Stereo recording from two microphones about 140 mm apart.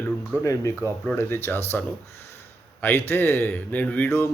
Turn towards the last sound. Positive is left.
turn(degrees=15)  # may be behind; listen again after turning